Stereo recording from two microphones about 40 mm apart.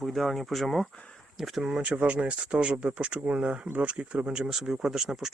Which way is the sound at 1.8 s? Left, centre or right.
Right.